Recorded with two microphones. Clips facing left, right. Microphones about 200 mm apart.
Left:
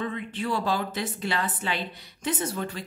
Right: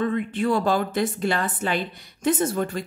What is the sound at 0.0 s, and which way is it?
Speech, 50° right (ahead or behind).